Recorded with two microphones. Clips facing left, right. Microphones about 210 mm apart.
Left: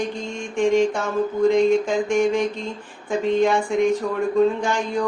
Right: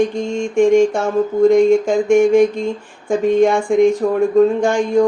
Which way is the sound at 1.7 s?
45° right (ahead or behind).